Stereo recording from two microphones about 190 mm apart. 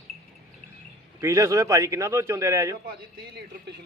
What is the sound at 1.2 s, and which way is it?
A man's voice, 15° right (ahead or behind).